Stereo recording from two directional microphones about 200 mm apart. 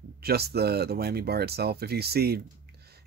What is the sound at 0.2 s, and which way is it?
Speech, 50° right (ahead or behind).